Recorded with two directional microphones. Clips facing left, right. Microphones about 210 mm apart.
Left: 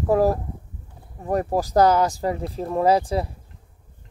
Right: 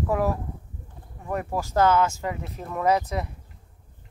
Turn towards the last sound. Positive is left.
turn(degrees=30)  # may be behind; listen again after turning